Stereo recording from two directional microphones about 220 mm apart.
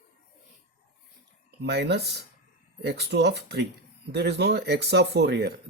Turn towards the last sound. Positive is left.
turn(degrees=-50)  # may be behind; listen again after turning